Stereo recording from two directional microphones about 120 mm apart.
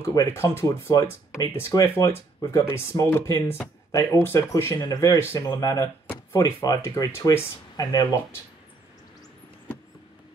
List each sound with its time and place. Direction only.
0.0 s speech: 25° left (ahead or behind)